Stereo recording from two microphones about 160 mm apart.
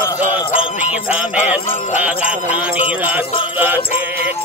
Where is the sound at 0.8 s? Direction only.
10° right (ahead or behind).